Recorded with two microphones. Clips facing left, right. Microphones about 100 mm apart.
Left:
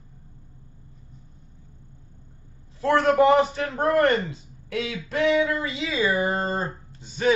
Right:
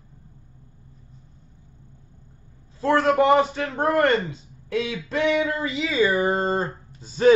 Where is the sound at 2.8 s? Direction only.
30° right (ahead or behind).